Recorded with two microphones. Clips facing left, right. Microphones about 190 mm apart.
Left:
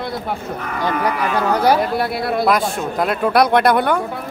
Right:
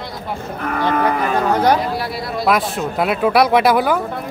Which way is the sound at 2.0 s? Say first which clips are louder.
Left 4 dB; 55° left (ahead or behind).